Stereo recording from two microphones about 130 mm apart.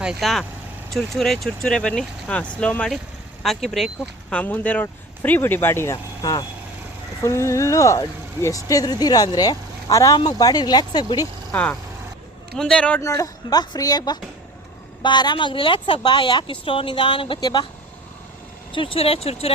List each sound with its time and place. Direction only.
0.0 s speech: 5° right (ahead or behind)
4.3 s speech: 10° left (ahead or behind); by 11.3 s 30° left (ahead or behind)
11.5 s speech: 10° left (ahead or behind)
13.0 s speech: 25° left (ahead or behind)
18.7 s speech: 45° left (ahead or behind)